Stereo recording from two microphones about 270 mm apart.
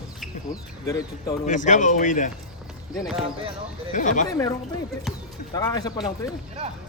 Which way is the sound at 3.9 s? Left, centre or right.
Left.